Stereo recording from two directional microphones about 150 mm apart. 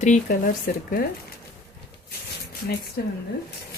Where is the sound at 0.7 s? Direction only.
65° left (ahead or behind).